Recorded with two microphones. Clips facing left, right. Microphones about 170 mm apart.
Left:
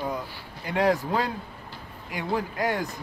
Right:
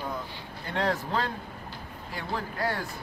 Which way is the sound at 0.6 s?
10° left (ahead or behind).